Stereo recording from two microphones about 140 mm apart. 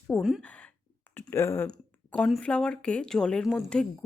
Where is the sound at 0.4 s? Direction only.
10° left (ahead or behind).